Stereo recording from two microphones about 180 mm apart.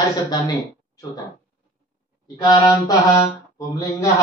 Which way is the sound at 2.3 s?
25° left (ahead or behind).